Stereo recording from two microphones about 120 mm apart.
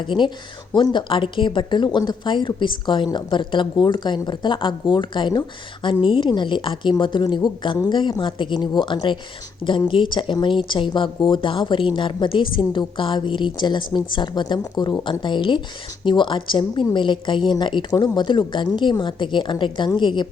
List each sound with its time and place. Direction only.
0.0 s speech: 40° left (ahead or behind)